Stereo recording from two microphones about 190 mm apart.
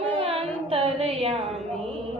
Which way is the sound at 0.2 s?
30° right (ahead or behind).